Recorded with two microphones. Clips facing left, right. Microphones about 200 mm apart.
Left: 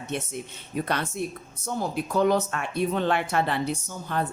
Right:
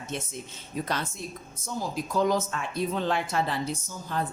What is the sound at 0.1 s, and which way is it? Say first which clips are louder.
Speech: left 4 dB; 60° left (ahead or behind).